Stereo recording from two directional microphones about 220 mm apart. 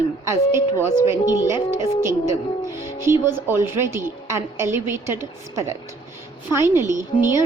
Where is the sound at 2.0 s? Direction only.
10° right (ahead or behind).